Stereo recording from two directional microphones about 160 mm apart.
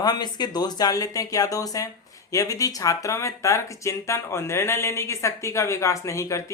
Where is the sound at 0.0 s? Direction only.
25° left (ahead or behind).